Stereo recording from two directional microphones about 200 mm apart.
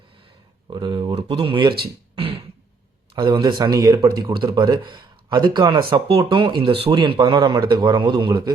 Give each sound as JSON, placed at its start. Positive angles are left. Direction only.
{"t": 0.7, "sound": "speech", "side_deg": -25}
{"t": 2.1, "sound": "beatboxing", "side_deg": -30}
{"t": 3.2, "sound": "speech", "side_deg": -20}